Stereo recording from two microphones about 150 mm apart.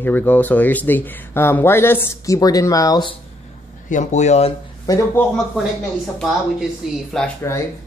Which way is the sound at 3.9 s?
50° left (ahead or behind).